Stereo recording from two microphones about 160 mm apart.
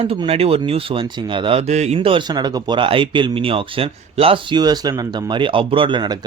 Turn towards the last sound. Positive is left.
turn(degrees=-30)  # may be behind; listen again after turning